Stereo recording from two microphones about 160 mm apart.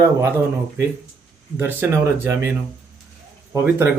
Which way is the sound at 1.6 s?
15° right (ahead or behind).